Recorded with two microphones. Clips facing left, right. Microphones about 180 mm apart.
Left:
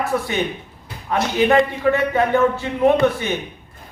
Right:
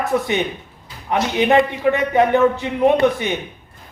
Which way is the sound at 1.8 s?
20° right (ahead or behind).